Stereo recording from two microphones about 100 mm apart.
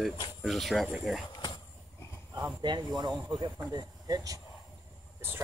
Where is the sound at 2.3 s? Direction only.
45° right (ahead or behind).